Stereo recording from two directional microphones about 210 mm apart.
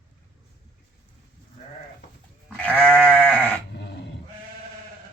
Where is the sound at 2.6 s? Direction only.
5° left (ahead or behind).